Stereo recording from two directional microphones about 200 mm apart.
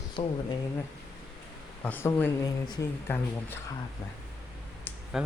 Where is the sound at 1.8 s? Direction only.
10° left (ahead or behind).